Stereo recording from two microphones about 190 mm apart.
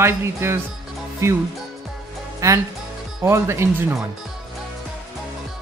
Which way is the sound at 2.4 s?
15° right (ahead or behind).